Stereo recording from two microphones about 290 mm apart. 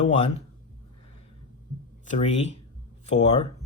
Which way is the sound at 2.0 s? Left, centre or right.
Left.